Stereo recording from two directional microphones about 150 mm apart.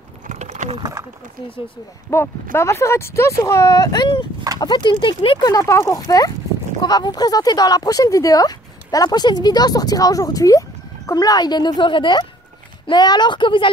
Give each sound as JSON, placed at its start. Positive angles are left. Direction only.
{"t": 0.3, "sound": "clip-clop", "side_deg": -50}
{"t": 2.1, "sound": "speech", "side_deg": 20}